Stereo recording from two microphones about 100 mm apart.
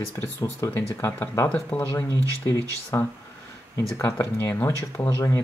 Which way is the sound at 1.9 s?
30° left (ahead or behind).